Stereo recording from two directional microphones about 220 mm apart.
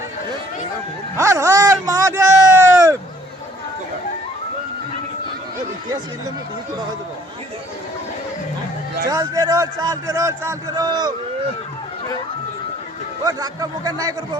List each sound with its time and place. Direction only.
1.1 s a sound: 15° right (ahead or behind)
9.0 s a man's voice: 15° right (ahead or behind)
13.2 s a man's voice: 15° right (ahead or behind)